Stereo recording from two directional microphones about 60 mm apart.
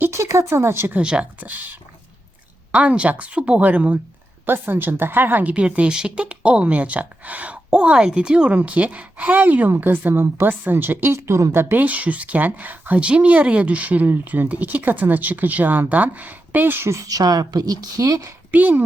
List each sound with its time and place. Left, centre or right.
0.1 s speech: right
1.0 s speech: centre
1.4 s speech: right
2.7 s speech: centre
4.4 s speech: right
11.9 s speech: right
16.9 s speech: right
18.5 s speech: right